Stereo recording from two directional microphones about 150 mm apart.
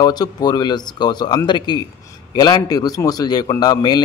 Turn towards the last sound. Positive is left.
turn(degrees=25)  # may be behind; listen again after turning